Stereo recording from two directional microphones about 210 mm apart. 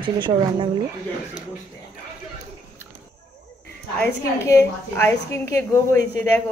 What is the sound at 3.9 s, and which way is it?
A woman's voice, 10° left (ahead or behind).